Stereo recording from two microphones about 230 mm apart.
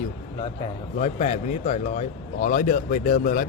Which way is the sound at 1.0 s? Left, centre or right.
Left.